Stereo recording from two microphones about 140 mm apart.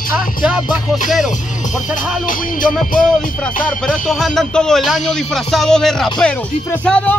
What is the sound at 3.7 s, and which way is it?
Speech, 5° left (ahead or behind).